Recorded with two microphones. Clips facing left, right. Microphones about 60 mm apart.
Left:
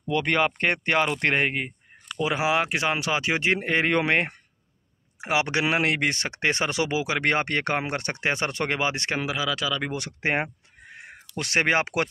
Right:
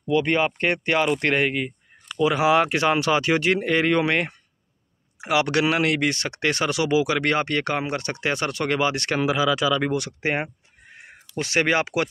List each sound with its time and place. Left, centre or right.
0.1 s speech: left
2.1 s speech: centre
3.4 s speech: left
5.2 s speech: left
9.2 s speech: centre
9.9 s speech: left